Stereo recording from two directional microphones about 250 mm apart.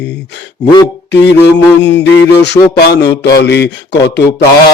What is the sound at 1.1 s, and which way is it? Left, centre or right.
Speech, left.